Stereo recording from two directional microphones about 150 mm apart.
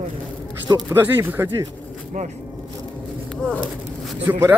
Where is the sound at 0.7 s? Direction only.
15° right (ahead or behind).